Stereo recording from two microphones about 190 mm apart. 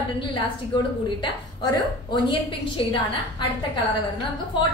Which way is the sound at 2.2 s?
25° left (ahead or behind).